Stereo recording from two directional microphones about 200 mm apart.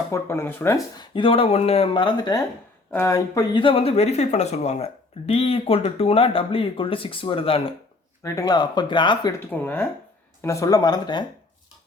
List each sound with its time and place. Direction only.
0.1 s speech: 10° left (ahead or behind)
1.1 s speech: 25° left (ahead or behind)
9.5 s speech: 10° left (ahead or behind)